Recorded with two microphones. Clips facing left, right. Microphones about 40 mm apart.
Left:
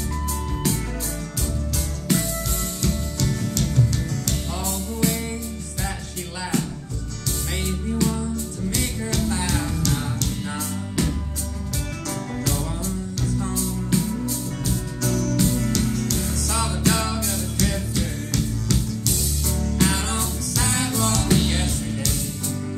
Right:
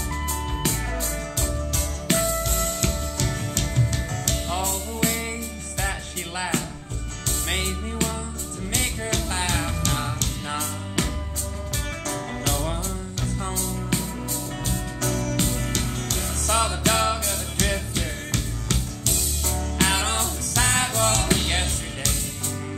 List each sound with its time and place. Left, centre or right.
2.0 s music: right
7.2 s music: right
7.9 s music: right
8.6 s music: right
12.1 s music: right